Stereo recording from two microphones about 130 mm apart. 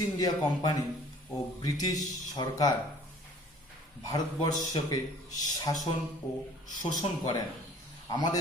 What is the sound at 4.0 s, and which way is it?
A man's voice, 30° left (ahead or behind).